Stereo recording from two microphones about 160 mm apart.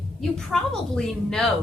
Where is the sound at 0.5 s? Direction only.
5° left (ahead or behind).